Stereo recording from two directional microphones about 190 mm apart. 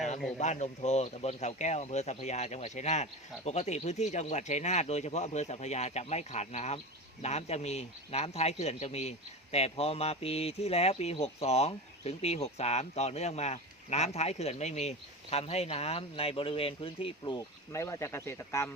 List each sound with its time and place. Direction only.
0.3 s a man's voice: 35° left (ahead or behind); by 18.7 s 15° left (ahead or behind)